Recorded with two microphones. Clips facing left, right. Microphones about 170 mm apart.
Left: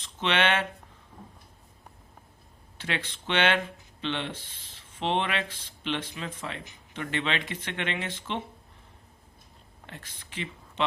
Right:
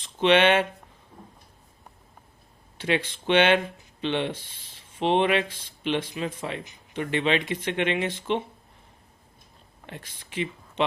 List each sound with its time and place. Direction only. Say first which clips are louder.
0.2 s speech: right 7 dB; 15° right (ahead or behind)
2.7 s speech: right 8 dB; 15° right (ahead or behind)
9.8 s speech: right 4 dB; 15° right (ahead or behind)